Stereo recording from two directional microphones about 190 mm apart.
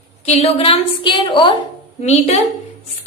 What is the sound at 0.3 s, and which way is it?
A woman's voice, 35° left (ahead or behind).